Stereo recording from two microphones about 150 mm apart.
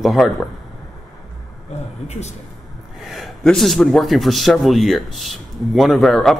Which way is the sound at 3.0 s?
Centre (ahead or behind).